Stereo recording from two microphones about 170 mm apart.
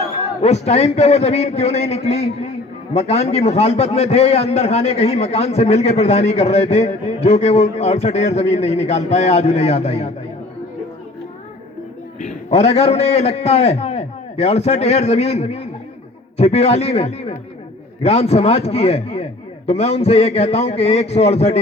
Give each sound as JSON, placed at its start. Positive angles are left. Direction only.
{"t": 0.4, "sound": "a man's voice", "side_deg": 40}
{"t": 12.2, "sound": "a man's voice", "side_deg": 40}